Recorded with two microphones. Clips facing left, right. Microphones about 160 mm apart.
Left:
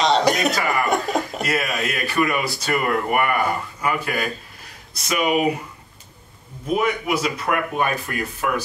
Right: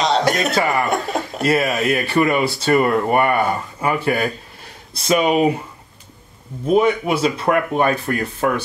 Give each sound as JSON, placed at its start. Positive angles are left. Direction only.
{"t": 0.0, "sound": "speech", "side_deg": 0}
{"t": 1.4, "sound": "speech", "side_deg": -30}
{"t": 6.7, "sound": "speech", "side_deg": -30}